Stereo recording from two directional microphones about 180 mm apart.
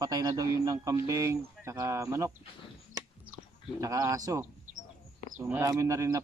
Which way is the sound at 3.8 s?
20° right (ahead or behind).